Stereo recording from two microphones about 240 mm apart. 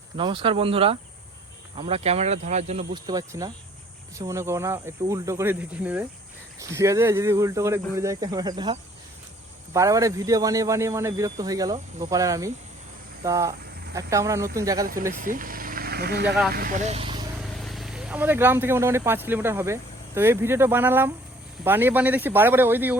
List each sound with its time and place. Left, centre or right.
0.2 s speech: right
15.1 s speech: right
17.4 s speech: centre